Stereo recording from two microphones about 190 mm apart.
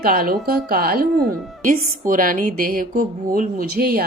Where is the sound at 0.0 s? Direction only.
50° right (ahead or behind).